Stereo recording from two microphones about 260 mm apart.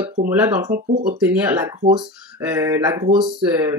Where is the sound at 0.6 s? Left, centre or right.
Right.